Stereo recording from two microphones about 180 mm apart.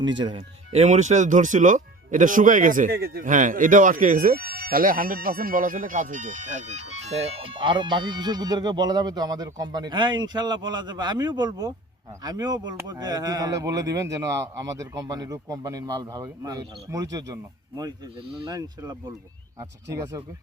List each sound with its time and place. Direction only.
0.0 s speech: 90° right
0.3 s speech: 30° right (ahead or behind)